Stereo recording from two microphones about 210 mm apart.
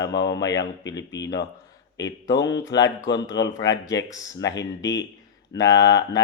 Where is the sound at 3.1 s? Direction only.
55° left (ahead or behind).